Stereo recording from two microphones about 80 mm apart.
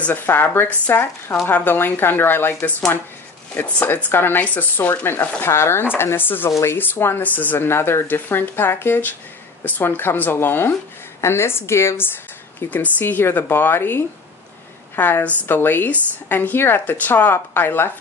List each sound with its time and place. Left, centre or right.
0.0 s a woman's voice: left
12.5 s a woman's voice: left